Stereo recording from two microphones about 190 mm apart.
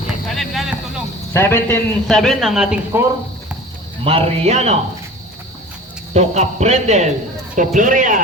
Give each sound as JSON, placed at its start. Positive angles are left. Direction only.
{"t": 0.3, "sound": "a sound", "side_deg": 0}
{"t": 1.3, "sound": "a man's voice", "side_deg": 10}
{"t": 4.0, "sound": "a man's voice", "side_deg": -35}
{"t": 6.1, "sound": "a man's voice", "side_deg": -35}